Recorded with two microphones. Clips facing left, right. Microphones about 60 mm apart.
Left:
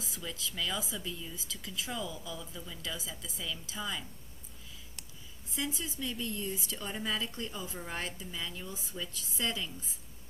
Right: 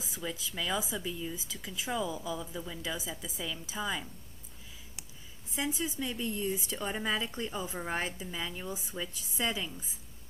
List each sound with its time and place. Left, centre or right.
0.0 s speech: centre
5.6 s speech: right